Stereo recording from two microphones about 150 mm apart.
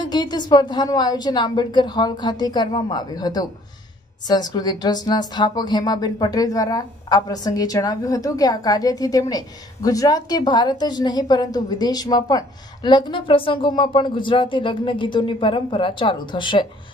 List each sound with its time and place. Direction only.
0.0 s a woman's voice: 30° left (ahead or behind)